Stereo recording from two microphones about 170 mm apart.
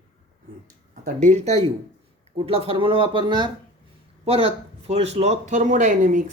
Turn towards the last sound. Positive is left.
turn(degrees=-50)  # may be behind; listen again after turning